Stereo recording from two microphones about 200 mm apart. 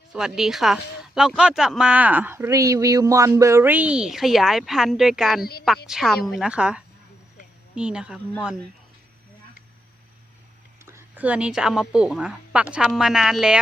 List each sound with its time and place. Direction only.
0.1 s speech: 5° right (ahead or behind)
10.8 s speech: 10° right (ahead or behind)